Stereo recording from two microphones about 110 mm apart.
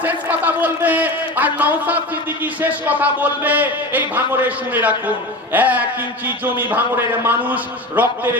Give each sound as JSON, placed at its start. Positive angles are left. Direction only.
{"t": 0.0, "sound": "a man's voice", "side_deg": -15}